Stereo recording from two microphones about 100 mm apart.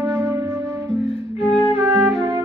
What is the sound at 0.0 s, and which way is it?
Music, 25° right (ahead or behind).